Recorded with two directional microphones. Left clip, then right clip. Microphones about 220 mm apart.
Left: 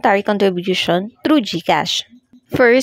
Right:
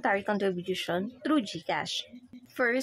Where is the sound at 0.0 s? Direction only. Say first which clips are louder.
Left 13 dB; 35° left (ahead or behind).